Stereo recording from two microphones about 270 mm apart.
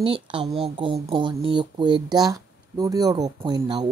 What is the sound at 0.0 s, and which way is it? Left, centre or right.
Speech, centre.